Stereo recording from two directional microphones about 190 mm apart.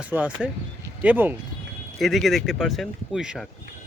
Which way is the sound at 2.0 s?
Centre (ahead or behind).